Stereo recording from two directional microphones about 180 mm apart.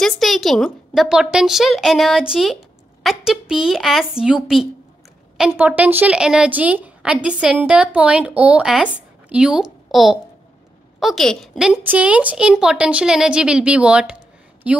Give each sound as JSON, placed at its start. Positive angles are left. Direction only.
{"t": 0.0, "sound": "a woman's voice", "side_deg": 0}